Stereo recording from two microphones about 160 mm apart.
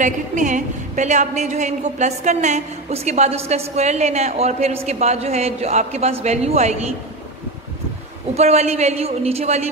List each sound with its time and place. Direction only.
0.0 s a woman's voice: 50° right (ahead or behind)
8.4 s a woman's voice: 45° right (ahead or behind)